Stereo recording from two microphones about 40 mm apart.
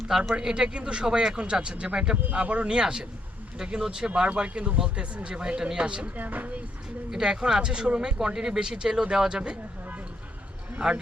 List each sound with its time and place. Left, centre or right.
0.3 s speech: centre
6.1 s speech: right
7.1 s speech: centre
10.8 s a man's voice: right